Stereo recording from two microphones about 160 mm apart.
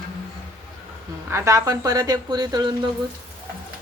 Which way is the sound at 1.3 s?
15° right (ahead or behind).